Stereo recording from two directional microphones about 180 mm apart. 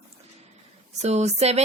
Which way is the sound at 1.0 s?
40° right (ahead or behind).